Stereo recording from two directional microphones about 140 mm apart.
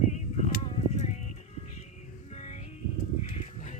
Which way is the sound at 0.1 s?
55° left (ahead or behind).